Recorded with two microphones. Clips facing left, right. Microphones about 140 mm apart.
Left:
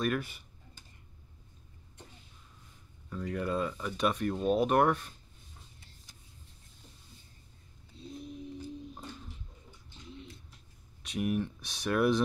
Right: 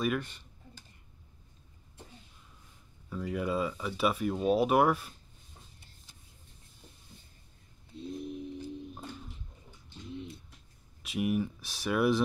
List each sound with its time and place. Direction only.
0.0 s speech: 5° left (ahead or behind)
3.1 s speech: 5° right (ahead or behind)
7.9 s a sound: 60° right (ahead or behind)
11.0 s speech: 5° right (ahead or behind)